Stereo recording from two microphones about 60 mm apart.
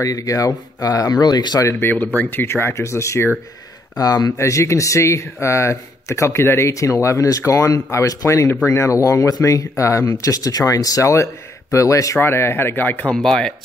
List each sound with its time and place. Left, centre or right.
0.0 s speech: left
1.8 s speech: left
2.4 s speech: left
4.4 s speech: left
6.7 s speech: left
8.6 s speech: left
12.2 s speech: left
13.0 s speech: centre